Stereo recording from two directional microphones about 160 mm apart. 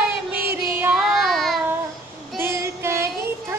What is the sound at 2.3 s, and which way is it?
Child singing, 15° right (ahead or behind).